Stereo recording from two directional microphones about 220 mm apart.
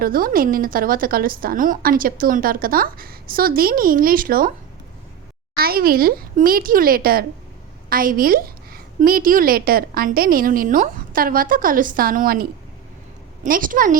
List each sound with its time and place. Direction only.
0.0 s a woman's voice: 40° right (ahead or behind)
5.5 s a woman's voice: 45° right (ahead or behind)